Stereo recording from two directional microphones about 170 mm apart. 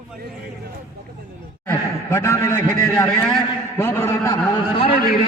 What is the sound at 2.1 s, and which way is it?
A man's voice, 15° left (ahead or behind).